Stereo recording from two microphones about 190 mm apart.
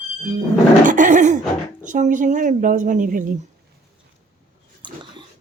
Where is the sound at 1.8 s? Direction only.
45° right (ahead or behind).